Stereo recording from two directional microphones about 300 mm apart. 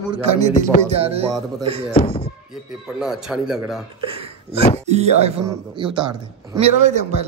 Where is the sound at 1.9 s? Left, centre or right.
Centre.